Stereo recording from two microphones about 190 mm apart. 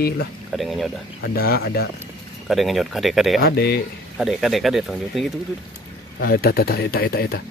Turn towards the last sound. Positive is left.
turn(degrees=55)  # may be behind; listen again after turning